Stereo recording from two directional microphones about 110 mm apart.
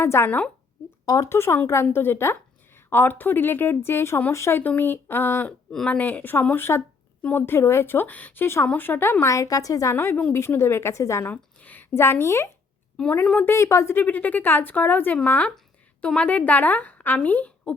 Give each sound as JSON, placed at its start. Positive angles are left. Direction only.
{"t": 0.0, "sound": "speech", "side_deg": 25}
{"t": 1.0, "sound": "speech", "side_deg": 30}
{"t": 11.3, "sound": "speech", "side_deg": 15}
{"t": 13.2, "sound": "speech", "side_deg": 10}
{"t": 13.5, "sound": "a woman's voice", "side_deg": 25}